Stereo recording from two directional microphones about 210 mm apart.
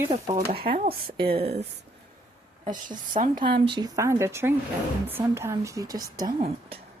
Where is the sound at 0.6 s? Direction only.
45° right (ahead or behind).